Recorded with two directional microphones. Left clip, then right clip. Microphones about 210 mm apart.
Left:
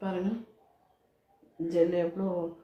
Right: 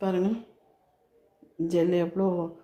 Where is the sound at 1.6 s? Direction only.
55° right (ahead or behind).